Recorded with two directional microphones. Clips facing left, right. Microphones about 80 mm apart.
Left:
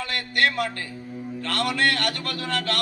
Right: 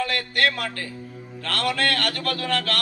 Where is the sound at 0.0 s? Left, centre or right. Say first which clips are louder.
Right 1 dB; left.